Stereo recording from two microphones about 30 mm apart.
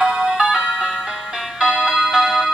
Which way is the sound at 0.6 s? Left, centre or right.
Right.